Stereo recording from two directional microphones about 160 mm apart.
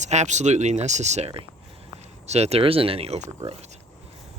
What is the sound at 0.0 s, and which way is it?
Speech, 45° right (ahead or behind).